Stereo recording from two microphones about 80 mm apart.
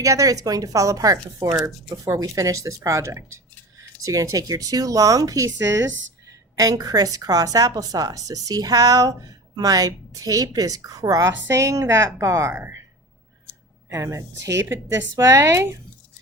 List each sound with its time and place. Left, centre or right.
0.0 s speech: right
13.9 s speech: right